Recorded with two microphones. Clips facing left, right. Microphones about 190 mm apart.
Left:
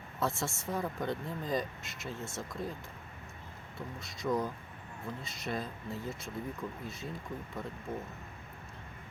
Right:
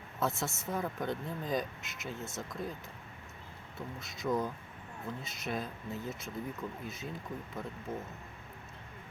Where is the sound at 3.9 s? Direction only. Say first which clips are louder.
Even; centre (ahead or behind).